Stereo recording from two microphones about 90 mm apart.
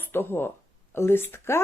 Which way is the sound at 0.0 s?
25° left (ahead or behind).